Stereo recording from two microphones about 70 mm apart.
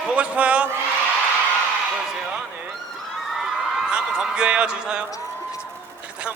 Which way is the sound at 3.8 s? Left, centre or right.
Centre.